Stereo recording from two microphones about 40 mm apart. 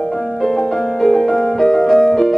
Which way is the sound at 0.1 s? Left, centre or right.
Centre.